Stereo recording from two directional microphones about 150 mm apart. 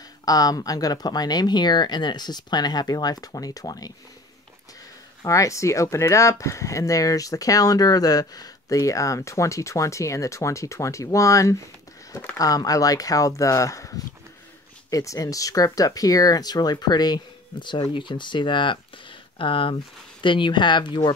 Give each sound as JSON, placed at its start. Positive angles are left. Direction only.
{"t": 0.2, "sound": "speech", "side_deg": 25}
{"t": 5.2, "sound": "speech", "side_deg": 20}
{"t": 12.1, "sound": "speech", "side_deg": 10}
{"t": 12.4, "sound": "speech", "side_deg": 25}